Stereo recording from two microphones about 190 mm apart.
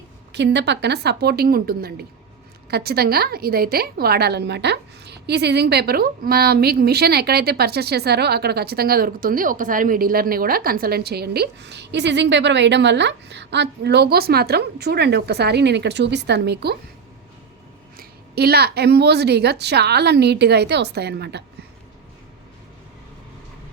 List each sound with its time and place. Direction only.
0.3 s a woman's voice: 65° right (ahead or behind)
17.9 s a woman's voice: 55° right (ahead or behind)